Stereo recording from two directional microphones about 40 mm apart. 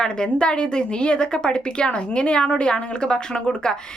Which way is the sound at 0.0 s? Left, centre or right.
Centre.